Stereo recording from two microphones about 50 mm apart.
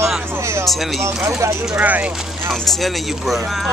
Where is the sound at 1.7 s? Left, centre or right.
Right.